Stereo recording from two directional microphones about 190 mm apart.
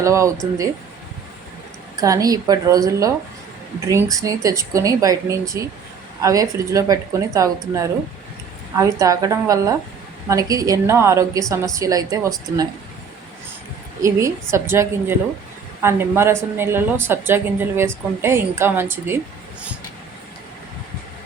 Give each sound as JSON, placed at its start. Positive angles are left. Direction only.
{"t": 0.0, "sound": "a woman's voice", "side_deg": -15}
{"t": 2.0, "sound": "a woman's voice", "side_deg": -20}
{"t": 14.0, "sound": "a woman's voice", "side_deg": -15}